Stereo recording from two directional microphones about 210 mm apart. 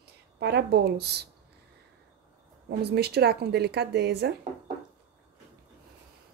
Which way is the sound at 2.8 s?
50° right (ahead or behind).